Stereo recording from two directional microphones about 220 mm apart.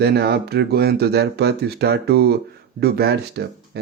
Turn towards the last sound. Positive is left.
turn(degrees=-50)  # may be behind; listen again after turning